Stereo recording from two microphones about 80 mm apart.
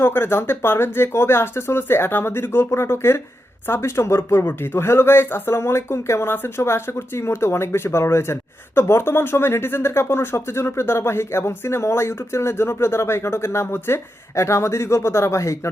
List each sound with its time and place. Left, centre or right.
0.0 s speech: left